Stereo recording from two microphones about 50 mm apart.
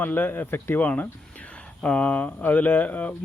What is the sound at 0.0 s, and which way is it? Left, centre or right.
Speech, left.